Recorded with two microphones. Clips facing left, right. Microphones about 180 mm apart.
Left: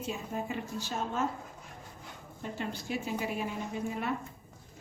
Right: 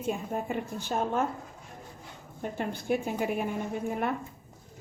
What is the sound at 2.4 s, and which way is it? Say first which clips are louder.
A woman's voice: right 4 dB; 55° right (ahead or behind).